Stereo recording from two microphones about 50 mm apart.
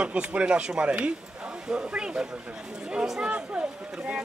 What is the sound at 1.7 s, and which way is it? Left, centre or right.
Speech, centre.